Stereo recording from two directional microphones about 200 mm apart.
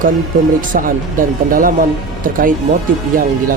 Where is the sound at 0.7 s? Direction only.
45° right (ahead or behind).